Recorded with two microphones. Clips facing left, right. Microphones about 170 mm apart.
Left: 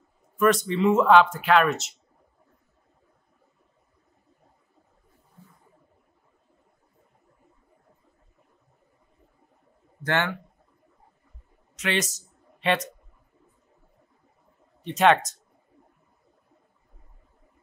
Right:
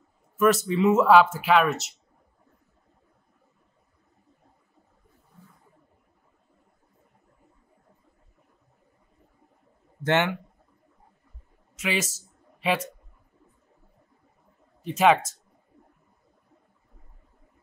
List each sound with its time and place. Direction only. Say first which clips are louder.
0.4 s speech: even; 5° right (ahead or behind)
10.0 s a man's voice: right 3 dB; 20° right (ahead or behind)
11.7 s a man's voice: left 1 dB; 5° right (ahead or behind)
14.8 s speech: even; 5° right (ahead or behind)